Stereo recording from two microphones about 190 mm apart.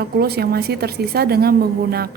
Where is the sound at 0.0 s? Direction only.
55° right (ahead or behind).